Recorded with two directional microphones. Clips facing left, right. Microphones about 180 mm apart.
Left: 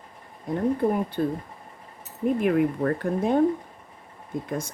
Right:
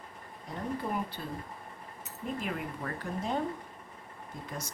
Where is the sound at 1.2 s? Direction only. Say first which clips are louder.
Left 13 dB; 50° left (ahead or behind).